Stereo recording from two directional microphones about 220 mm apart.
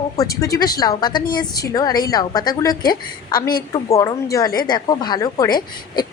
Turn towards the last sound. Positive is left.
turn(degrees=20)  # may be behind; listen again after turning